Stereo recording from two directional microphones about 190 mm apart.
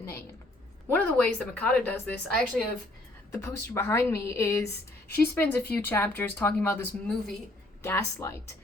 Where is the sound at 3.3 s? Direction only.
15° left (ahead or behind).